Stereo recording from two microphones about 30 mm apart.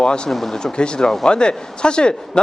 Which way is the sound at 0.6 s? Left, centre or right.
Left.